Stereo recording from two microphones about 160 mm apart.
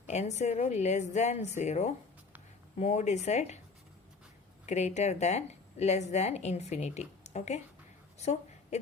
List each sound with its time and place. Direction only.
0.1 s speech: 45° left (ahead or behind)
4.6 s speech: 45° left (ahead or behind)
8.2 s a sound: 45° left (ahead or behind)